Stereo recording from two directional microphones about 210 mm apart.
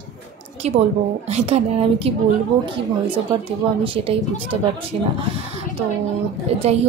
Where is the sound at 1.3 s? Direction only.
30° right (ahead or behind).